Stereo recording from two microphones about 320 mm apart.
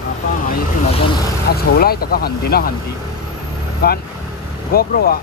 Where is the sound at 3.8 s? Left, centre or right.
Left.